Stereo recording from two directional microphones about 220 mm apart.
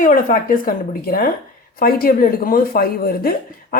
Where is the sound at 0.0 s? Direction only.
40° left (ahead or behind).